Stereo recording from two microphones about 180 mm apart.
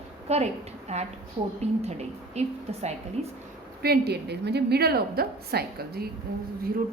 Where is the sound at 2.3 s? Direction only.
35° right (ahead or behind).